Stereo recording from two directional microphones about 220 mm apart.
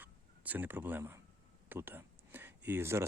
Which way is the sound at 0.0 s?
10° right (ahead or behind).